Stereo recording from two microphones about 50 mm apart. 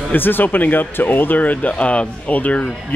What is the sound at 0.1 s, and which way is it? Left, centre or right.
Speech, left.